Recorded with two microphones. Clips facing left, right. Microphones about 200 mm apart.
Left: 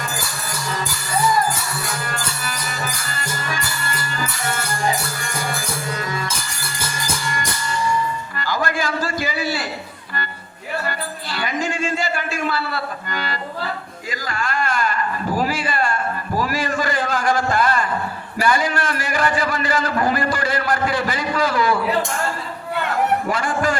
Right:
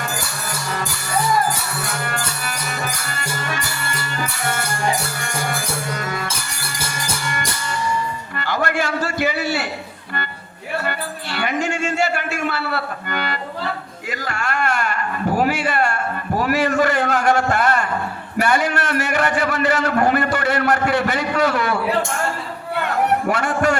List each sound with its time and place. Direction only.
2.0 s music: 55° right (ahead or behind)
5.9 s music: 60° right (ahead or behind)
8.4 s a sound: 65° right (ahead or behind)
10.8 s music: 65° right (ahead or behind)
14.1 s a sound: 65° right (ahead or behind)
23.3 s music: 65° right (ahead or behind)